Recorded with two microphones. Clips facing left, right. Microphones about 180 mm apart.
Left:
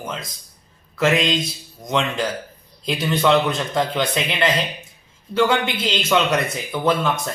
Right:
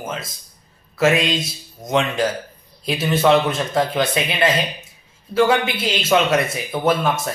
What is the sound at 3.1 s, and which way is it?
A man's voice, 5° right (ahead or behind).